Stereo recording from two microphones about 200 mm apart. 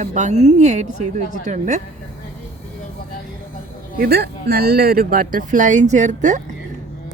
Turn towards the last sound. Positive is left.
turn(degrees=-40)  # may be behind; listen again after turning